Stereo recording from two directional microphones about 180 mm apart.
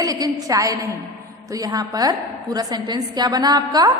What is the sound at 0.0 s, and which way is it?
A woman's voice, 20° right (ahead or behind).